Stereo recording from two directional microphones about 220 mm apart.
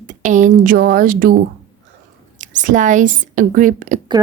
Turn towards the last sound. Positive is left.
turn(degrees=-35)  # may be behind; listen again after turning